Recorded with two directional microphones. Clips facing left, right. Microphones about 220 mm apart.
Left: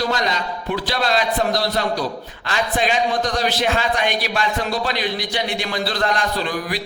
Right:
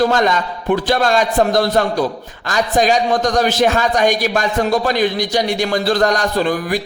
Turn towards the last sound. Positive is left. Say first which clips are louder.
# right 6 dB
turn(degrees=-45)  # may be behind; listen again after turning